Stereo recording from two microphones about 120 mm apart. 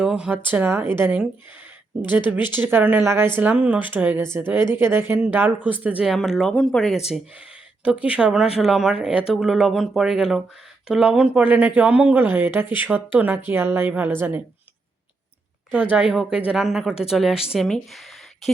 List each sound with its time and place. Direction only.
0.0 s speech: 5° right (ahead or behind)
2.3 s speech: 15° right (ahead or behind)
6.0 s speech: centre (ahead or behind)
7.9 s speech: 10° right (ahead or behind)
15.7 s speech: 10° right (ahead or behind)
16.5 s speech: centre (ahead or behind)